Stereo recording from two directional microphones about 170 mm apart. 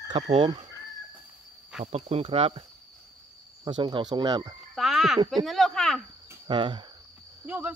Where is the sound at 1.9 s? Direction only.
35° right (ahead or behind).